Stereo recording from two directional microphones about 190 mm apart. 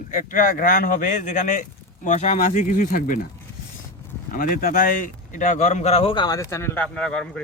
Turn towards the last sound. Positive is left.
turn(degrees=5)  # may be behind; listen again after turning